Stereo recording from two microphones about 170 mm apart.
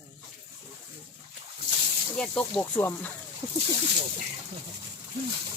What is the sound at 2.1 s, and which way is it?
Speech, 5° left (ahead or behind).